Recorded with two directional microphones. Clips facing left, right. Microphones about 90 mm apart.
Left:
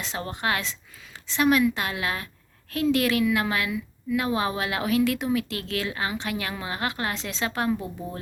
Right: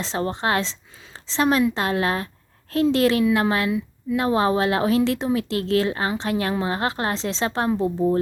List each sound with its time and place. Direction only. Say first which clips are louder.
0.0 s a woman's voice: right 5 dB; 30° right (ahead or behind)